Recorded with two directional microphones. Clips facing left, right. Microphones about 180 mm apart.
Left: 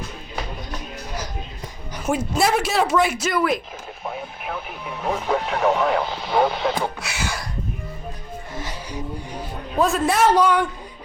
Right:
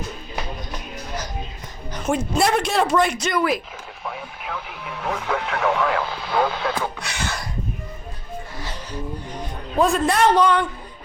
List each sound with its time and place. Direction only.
2.0 s speech: 5° left (ahead or behind)
4.0 s speech: 20° left (ahead or behind)
7.0 s a sound: 5° left (ahead or behind)
8.5 s music: 15° left (ahead or behind)